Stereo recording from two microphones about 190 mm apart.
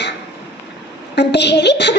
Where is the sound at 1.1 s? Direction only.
65° left (ahead or behind).